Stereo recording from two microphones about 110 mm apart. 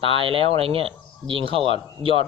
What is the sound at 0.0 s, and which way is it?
A man's voice, 55° right (ahead or behind).